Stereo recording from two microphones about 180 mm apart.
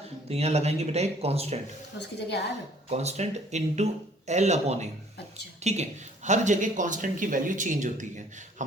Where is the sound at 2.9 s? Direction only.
35° right (ahead or behind).